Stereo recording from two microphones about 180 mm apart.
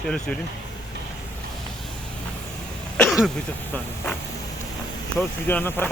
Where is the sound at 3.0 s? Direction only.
Centre (ahead or behind).